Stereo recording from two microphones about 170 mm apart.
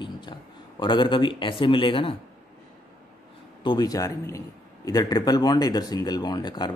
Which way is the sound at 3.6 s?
25° left (ahead or behind).